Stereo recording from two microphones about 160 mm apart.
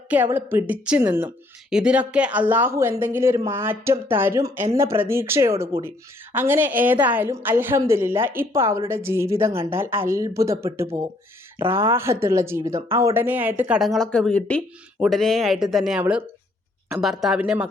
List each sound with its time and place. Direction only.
0.1 s speech: 15° right (ahead or behind)
13.7 s speech: centre (ahead or behind)